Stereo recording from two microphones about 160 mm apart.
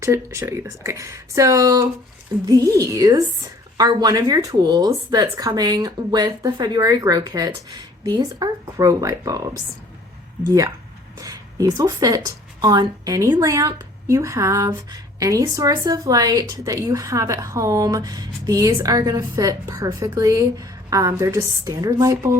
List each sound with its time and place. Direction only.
0.0 s speech: 20° right (ahead or behind)